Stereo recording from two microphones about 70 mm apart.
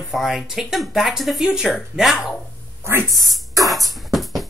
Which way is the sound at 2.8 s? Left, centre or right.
Right.